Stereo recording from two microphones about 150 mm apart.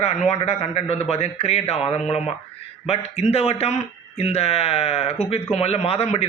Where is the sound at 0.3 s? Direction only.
45° left (ahead or behind).